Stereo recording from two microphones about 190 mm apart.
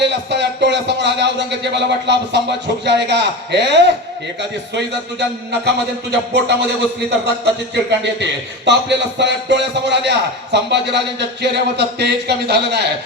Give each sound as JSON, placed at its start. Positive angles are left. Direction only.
{"t": 0.0, "sound": "speech", "side_deg": -65}
{"t": 5.2, "sound": "speech", "side_deg": -60}
{"t": 7.9, "sound": "speech", "side_deg": -65}